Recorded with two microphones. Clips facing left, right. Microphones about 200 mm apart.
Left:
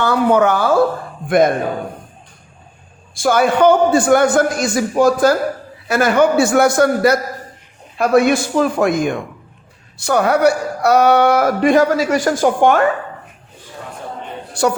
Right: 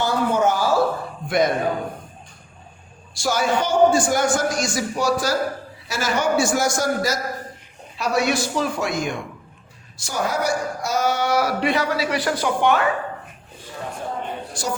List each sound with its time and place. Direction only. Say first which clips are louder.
0.0 s speech: left 6 dB; 60° left (ahead or behind)
3.2 s speech: left 8 dB; 55° left (ahead or behind)